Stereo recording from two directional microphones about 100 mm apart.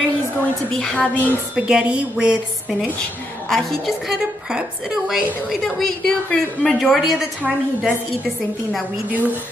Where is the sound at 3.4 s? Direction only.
5° left (ahead or behind).